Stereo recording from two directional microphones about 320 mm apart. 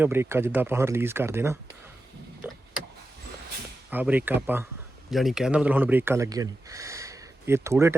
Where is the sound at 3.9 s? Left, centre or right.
Centre.